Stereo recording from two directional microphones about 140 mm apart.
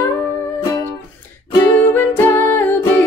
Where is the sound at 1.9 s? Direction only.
15° left (ahead or behind).